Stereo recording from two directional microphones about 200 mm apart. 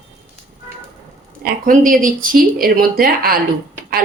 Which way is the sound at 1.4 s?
40° right (ahead or behind).